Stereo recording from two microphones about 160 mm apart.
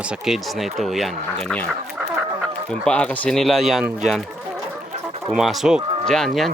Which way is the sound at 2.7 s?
5° left (ahead or behind).